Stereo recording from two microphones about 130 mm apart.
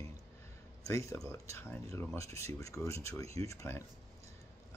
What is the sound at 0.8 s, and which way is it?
Speech, 25° left (ahead or behind).